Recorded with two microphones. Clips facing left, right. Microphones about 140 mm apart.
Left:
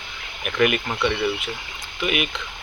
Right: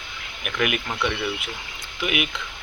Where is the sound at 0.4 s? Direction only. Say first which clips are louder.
Left 5 dB; 5° right (ahead or behind).